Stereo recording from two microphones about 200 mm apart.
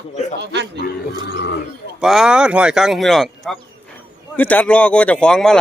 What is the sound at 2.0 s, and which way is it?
Speech, 5° right (ahead or behind).